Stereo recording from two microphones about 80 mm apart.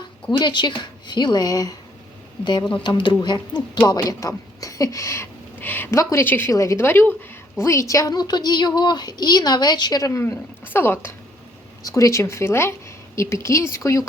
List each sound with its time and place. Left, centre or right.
0.3 s a woman's voice: left
2.4 s a woman's voice: left
2.8 s speech: left
5.9 s speech: left
6.2 s a woman's voice: left
6.5 s speech: left
6.8 s a woman's voice: left
7.6 s a woman's voice: left
10.1 s a woman's voice: left
11.8 s speech: left